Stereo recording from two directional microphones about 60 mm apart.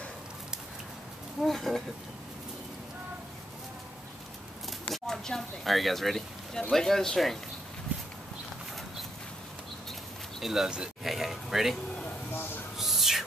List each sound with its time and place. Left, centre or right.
1.4 s speech: centre
4.9 s a sound: centre
6.7 s speech: centre
10.4 s speech: centre
12.3 s a sound: left
12.7 s music: centre